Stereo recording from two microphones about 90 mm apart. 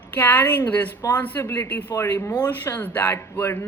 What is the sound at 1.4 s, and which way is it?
Speech, 30° left (ahead or behind).